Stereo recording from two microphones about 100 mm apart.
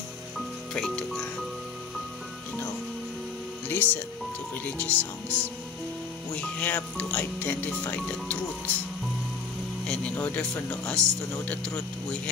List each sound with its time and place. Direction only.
0.7 s speech: 5° left (ahead or behind)
3.6 s speech: 20° left (ahead or behind)
9.8 s speech: 15° left (ahead or behind)